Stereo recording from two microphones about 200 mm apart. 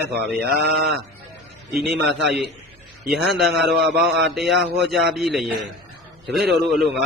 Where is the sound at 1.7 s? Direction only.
60° right (ahead or behind).